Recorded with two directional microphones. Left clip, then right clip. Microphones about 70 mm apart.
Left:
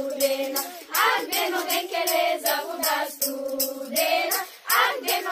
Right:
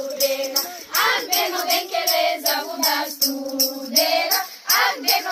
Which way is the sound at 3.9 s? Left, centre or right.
Left.